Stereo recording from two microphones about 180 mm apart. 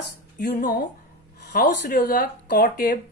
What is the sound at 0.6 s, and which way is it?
Speech, 50° left (ahead or behind).